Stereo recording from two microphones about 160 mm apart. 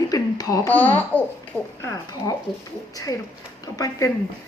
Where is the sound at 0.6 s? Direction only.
10° left (ahead or behind).